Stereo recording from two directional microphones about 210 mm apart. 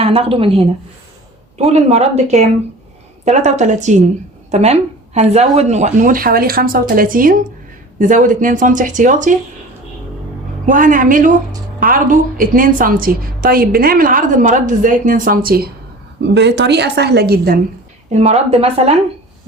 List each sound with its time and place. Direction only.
0.0 s a woman's voice: 25° right (ahead or behind)
10.7 s a woman's voice: 40° right (ahead or behind)
18.1 s speech: 30° right (ahead or behind)